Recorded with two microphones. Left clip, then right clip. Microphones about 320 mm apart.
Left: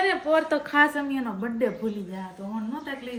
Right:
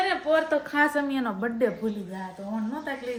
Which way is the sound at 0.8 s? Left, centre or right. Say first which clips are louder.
Left 1 dB; centre.